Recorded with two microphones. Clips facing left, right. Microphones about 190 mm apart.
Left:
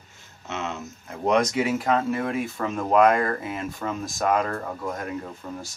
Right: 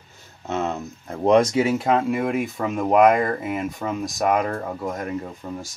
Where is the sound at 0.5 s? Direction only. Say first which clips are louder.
Right 6 dB; 35° right (ahead or behind).